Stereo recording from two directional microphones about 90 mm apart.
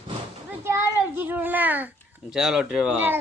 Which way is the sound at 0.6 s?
30° right (ahead or behind).